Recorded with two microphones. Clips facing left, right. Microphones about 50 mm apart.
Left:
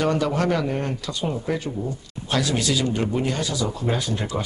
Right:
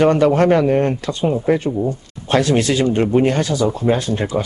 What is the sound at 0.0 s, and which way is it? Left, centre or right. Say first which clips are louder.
Speech: right 9 dB; right.